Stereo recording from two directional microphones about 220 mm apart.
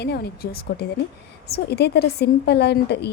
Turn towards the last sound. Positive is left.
turn(degrees=50)  # may be behind; listen again after turning